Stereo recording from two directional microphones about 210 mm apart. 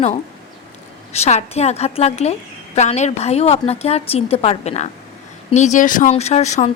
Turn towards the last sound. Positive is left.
turn(degrees=35)  # may be behind; listen again after turning